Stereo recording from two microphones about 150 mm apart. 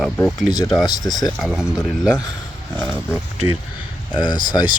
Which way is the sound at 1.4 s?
5° right (ahead or behind).